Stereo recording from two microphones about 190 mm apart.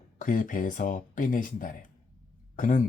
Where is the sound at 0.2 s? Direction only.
45° left (ahead or behind).